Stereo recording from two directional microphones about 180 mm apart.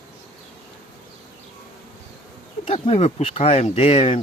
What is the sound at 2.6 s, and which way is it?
Speech, 30° left (ahead or behind).